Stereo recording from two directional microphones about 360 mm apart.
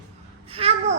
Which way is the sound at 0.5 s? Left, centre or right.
Centre.